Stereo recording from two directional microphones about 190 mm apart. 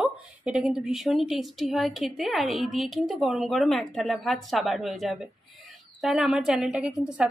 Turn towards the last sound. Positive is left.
turn(degrees=-5)  # may be behind; listen again after turning